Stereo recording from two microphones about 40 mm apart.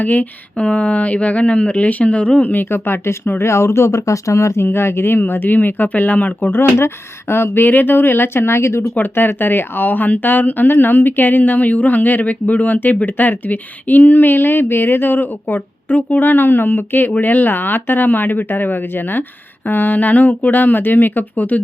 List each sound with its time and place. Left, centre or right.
0.0 s speech: left
0.6 s speech: left
2.6 s speech: left
6.5 s speech: left
7.7 s speech: left
9.0 s speech: left
12.2 s speech: left
17.2 s speech: left